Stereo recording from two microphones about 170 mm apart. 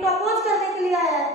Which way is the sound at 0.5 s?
Centre (ahead or behind).